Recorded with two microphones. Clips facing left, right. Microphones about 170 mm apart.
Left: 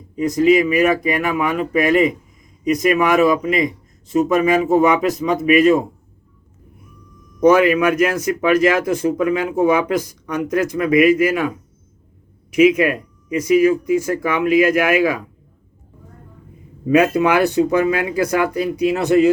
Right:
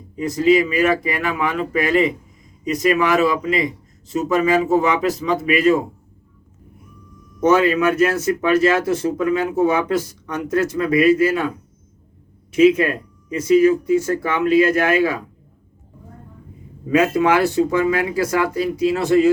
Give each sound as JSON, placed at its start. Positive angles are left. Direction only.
{"t": 0.2, "sound": "a man's voice", "side_deg": 20}
{"t": 7.3, "sound": "a man's voice", "side_deg": 15}
{"t": 17.0, "sound": "speech", "side_deg": 20}